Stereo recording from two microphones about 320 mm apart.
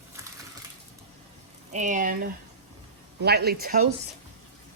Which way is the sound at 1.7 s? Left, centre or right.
Right.